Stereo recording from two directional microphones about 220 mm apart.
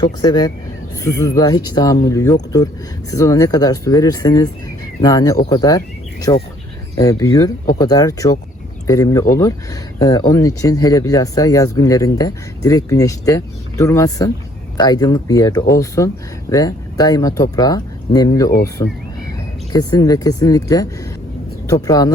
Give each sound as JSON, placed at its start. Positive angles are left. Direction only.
{"t": 0.0, "sound": "speech", "side_deg": 15}